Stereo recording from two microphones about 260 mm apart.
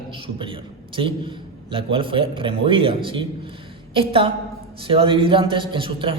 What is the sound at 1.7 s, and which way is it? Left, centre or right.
A man's voice, centre.